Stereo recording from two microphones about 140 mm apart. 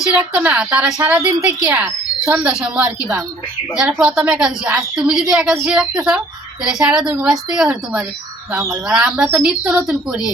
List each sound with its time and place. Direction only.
0.2 s a woman's voice: 10° right (ahead or behind)